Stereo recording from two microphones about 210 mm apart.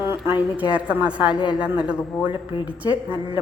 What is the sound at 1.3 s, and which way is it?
Speech, 20° left (ahead or behind).